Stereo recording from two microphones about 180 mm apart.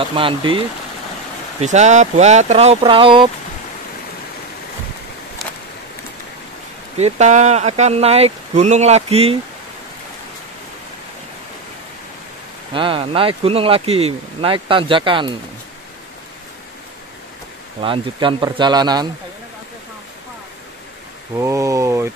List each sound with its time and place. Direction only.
0.0 s speech: 30° right (ahead or behind)
1.6 s speech: 40° right (ahead or behind)
7.0 s speech: 40° right (ahead or behind)
12.7 s speech: 30° right (ahead or behind)
17.8 s speech: 30° right (ahead or behind)
21.4 s speech: 15° right (ahead or behind)